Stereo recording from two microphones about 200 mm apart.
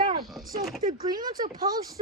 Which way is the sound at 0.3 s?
Centre (ahead or behind).